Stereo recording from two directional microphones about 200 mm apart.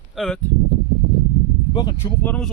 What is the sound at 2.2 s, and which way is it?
Speech, 5° left (ahead or behind).